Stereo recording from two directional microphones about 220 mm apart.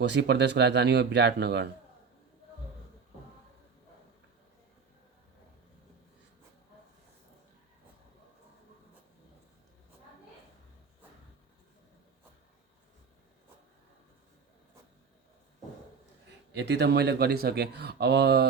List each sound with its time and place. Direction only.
0.0 s speech: 50° right (ahead or behind)
16.5 s speech: 50° right (ahead or behind)